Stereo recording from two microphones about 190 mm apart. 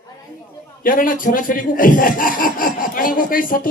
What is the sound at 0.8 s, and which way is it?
Speech, 45° left (ahead or behind).